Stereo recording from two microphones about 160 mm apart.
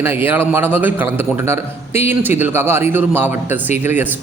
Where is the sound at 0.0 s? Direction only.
15° right (ahead or behind).